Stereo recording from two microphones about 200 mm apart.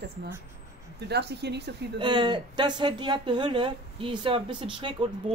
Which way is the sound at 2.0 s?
25° right (ahead or behind).